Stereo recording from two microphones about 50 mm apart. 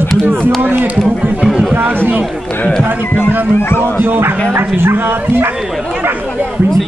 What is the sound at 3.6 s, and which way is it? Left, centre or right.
Speech, left.